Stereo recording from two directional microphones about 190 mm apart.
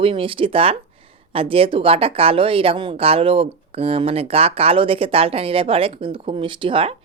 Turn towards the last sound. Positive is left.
turn(degrees=-30)  # may be behind; listen again after turning